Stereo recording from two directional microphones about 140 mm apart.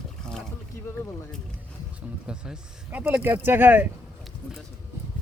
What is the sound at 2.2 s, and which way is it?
Speech, 5° right (ahead or behind).